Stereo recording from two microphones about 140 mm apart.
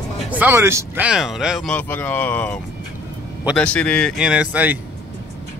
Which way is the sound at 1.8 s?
15° left (ahead or behind).